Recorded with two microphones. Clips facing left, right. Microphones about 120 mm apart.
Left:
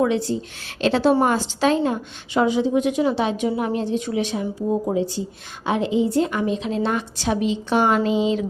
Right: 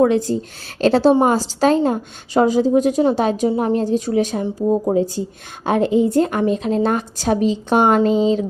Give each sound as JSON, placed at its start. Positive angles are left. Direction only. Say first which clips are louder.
{"t": 0.0, "sound": "a woman's voice", "louder": "right 5 dB", "side_deg": -45}